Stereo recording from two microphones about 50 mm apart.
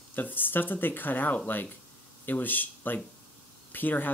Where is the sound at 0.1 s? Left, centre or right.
Left.